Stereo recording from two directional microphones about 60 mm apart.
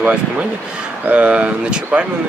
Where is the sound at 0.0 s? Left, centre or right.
Right.